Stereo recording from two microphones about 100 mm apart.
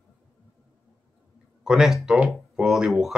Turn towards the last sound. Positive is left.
turn(degrees=-5)  # may be behind; listen again after turning